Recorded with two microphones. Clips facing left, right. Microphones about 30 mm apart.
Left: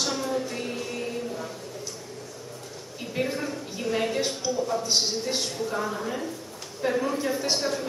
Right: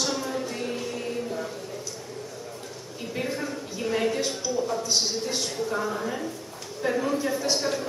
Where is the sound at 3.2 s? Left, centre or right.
Centre.